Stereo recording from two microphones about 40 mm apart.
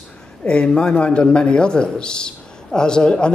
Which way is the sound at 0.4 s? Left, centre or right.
Left.